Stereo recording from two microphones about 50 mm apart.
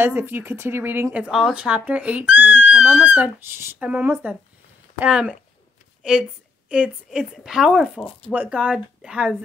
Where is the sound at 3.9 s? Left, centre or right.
Right.